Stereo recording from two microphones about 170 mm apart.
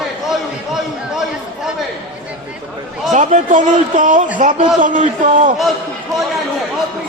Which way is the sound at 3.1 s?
45° right (ahead or behind).